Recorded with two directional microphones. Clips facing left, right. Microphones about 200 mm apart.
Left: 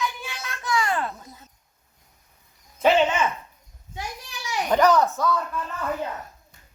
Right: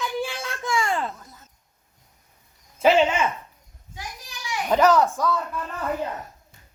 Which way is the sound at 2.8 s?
10° right (ahead or behind).